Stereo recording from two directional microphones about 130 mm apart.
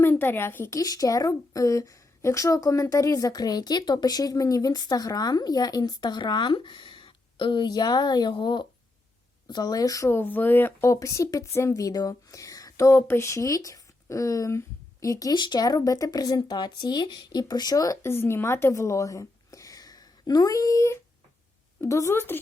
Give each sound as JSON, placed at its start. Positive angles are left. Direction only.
{"t": 0.0, "sound": "a woman's voice", "side_deg": 15}